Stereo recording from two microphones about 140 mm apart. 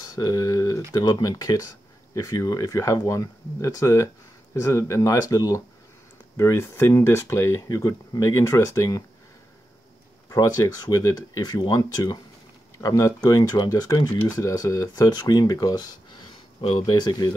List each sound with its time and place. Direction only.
0.0 s a sound: 25° left (ahead or behind)
0.9 s speech: 25° left (ahead or behind)
10.3 s speech: 25° left (ahead or behind)
16.6 s speech: 45° left (ahead or behind)
16.9 s speech: 30° left (ahead or behind)